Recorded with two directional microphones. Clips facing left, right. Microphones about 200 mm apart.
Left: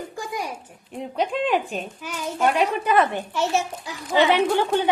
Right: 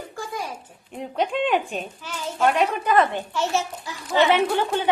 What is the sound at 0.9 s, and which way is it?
A woman's voice, centre (ahead or behind).